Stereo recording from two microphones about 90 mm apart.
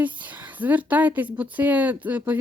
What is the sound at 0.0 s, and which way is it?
Speech, 20° right (ahead or behind).